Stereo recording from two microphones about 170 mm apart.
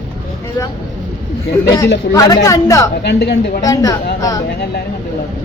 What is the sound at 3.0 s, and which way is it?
Speech, 85° left.